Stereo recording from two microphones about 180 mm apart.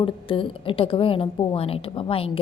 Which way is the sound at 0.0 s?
30° left (ahead or behind).